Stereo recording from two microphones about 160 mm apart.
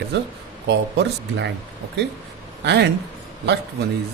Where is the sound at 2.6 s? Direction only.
90° right.